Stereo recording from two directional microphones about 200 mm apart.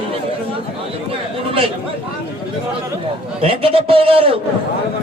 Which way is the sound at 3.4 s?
30° right (ahead or behind).